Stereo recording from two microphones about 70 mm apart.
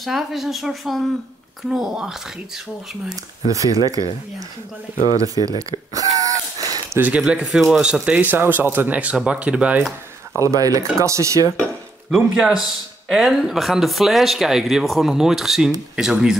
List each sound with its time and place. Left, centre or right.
0.0 s speech: centre
3.4 s speech: right
5.6 s gasp: right
7.2 s speech: centre
7.8 s speech: centre
10.4 s speech: right
11.0 s speech: right
12.1 s speech: centre